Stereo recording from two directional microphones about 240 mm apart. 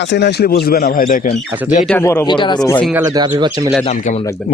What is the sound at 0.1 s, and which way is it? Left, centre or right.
Speech, left.